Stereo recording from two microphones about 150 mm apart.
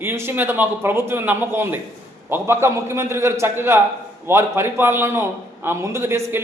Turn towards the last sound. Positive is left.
turn(degrees=-15)  # may be behind; listen again after turning